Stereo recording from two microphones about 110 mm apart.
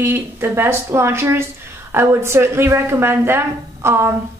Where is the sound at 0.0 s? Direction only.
20° right (ahead or behind).